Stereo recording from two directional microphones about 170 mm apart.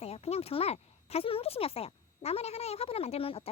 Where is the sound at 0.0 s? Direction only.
35° left (ahead or behind).